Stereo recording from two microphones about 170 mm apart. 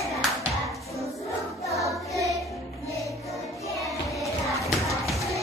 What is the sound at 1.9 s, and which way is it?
Music, centre (ahead or behind).